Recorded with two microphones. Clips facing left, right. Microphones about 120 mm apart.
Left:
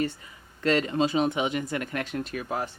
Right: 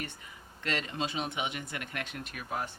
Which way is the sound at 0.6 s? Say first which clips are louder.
Left 10 dB; 35° left (ahead or behind).